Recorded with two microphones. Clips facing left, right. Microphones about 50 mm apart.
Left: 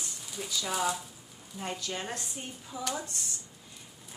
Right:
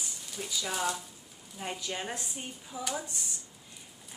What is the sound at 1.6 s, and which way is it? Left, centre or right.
A woman's voice, centre.